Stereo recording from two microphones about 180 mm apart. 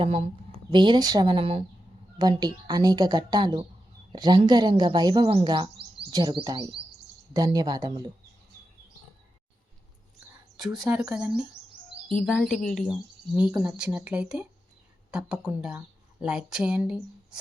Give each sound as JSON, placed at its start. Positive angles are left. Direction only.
{"t": 0.0, "sound": "a woman's voice", "side_deg": -35}
{"t": 5.3, "sound": "music", "side_deg": -30}
{"t": 7.3, "sound": "a woman's voice", "side_deg": -20}
{"t": 10.8, "sound": "speech", "side_deg": -5}